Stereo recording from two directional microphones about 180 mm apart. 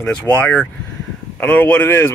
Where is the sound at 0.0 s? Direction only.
5° left (ahead or behind).